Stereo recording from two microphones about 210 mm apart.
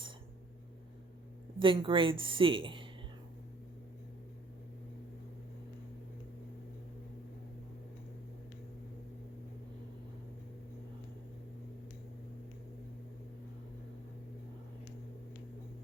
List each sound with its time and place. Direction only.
1.5 s a woman's voice: 25° right (ahead or behind)